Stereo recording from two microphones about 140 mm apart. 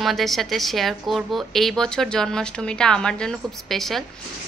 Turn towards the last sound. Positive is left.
turn(degrees=0)  # may be behind; listen again after turning